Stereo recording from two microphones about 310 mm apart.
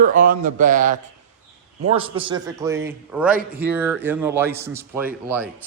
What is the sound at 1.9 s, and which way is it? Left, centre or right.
A man's voice, centre.